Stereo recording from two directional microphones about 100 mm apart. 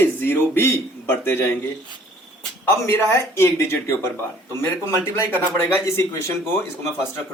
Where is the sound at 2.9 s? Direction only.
25° left (ahead or behind).